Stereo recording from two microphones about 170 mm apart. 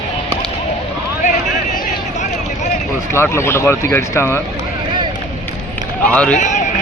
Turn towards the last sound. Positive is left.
turn(degrees=45)  # may be behind; listen again after turning